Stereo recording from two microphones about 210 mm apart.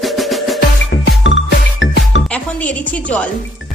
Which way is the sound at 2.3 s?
5° left (ahead or behind).